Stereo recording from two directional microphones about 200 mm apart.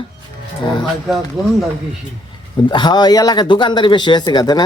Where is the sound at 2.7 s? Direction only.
20° left (ahead or behind).